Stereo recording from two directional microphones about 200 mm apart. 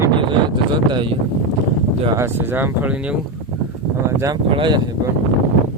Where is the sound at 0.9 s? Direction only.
25° right (ahead or behind).